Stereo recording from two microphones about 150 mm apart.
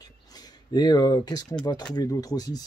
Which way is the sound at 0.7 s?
25° left (ahead or behind).